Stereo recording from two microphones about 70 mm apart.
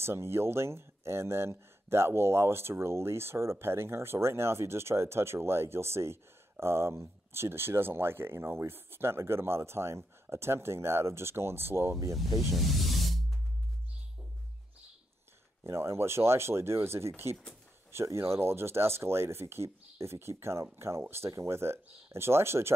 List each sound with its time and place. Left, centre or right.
0.0 s speech: right
12.5 s snake: centre
15.6 s speech: right